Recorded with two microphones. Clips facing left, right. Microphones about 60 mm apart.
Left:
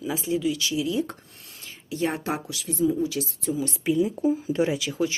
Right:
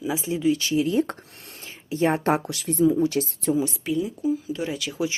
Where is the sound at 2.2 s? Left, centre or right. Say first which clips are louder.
Right 7 dB; right.